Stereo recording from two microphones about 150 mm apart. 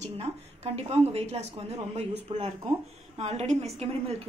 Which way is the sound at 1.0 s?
45° right (ahead or behind).